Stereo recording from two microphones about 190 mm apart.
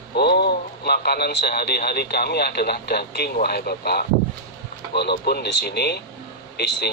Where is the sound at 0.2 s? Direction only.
60° left (ahead or behind).